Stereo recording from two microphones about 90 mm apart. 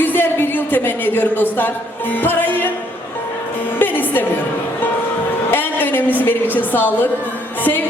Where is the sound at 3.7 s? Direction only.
20° left (ahead or behind).